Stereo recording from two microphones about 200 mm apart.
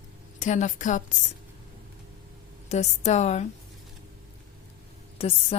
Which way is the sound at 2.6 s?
35° left (ahead or behind).